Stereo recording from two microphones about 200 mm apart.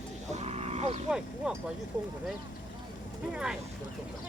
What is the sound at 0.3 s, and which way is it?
Sheep, 30° right (ahead or behind).